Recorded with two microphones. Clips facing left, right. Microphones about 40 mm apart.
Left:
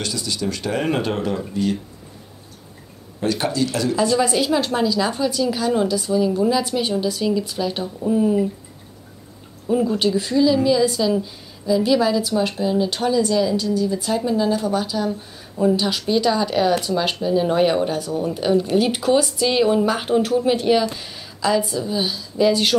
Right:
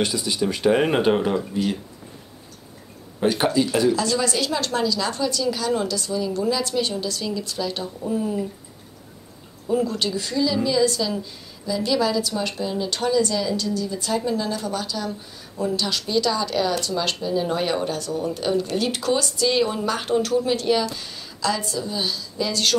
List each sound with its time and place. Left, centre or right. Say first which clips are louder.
0.0 s speech: right 2 dB; centre
3.2 s speech: right 1 dB; centre
3.9 s a woman's voice: left 4 dB; centre
9.7 s a woman's voice: left 4 dB; centre